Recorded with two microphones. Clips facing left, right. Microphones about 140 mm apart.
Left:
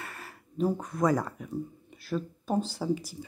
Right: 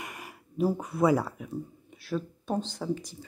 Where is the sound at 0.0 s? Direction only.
15° right (ahead or behind).